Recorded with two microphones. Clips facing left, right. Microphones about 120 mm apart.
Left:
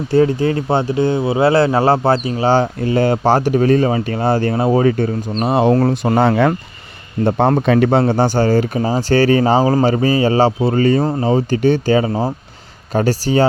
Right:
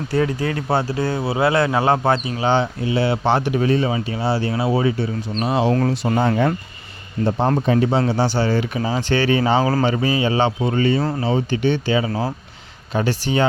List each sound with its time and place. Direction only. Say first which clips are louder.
0.1 s speech: left 7 dB; 30° left (ahead or behind); by 6.2 s 50° left (ahead or behind)
6.2 s speech: left 5 dB; 80° left
7.3 s speech: left 5 dB; 65° left (ahead or behind)
7.6 s speech: left 4 dB; 80° left
7.9 s speech: left 5 dB; 50° left (ahead or behind)